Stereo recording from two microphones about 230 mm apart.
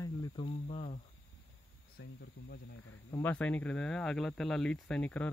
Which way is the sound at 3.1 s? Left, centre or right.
Centre.